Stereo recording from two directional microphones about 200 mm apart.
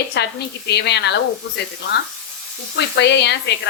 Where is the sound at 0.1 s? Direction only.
55° left (ahead or behind).